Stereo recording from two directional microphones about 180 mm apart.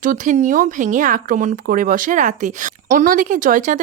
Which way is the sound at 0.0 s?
45° right (ahead or behind).